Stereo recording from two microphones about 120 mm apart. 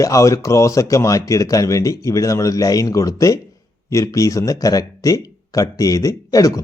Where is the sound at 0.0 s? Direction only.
25° left (ahead or behind).